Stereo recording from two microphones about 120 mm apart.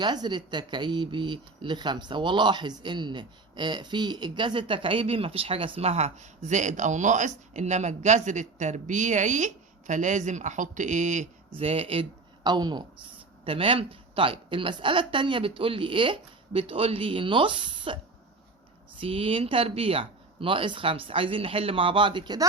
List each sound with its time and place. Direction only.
0.0 s speech: 40° right (ahead or behind); by 11.3 s 90° right
11.5 s speech: 55° right (ahead or behind)
12.4 s speech: 35° right (ahead or behind)